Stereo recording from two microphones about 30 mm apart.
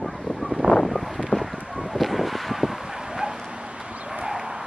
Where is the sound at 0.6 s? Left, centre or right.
Right.